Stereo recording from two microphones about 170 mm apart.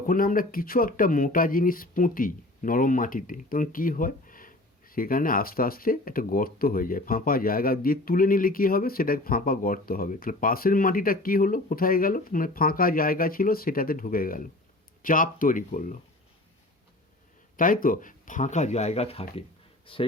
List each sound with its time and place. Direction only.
0.0 s speech: 55° left (ahead or behind)
17.6 s speech: 55° left (ahead or behind); by 20.0 s 30° left (ahead or behind)